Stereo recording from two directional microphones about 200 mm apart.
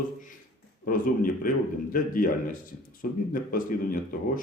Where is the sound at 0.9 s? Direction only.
45° left (ahead or behind).